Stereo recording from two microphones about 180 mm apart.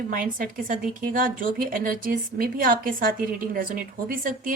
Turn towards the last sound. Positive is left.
turn(degrees=-50)  # may be behind; listen again after turning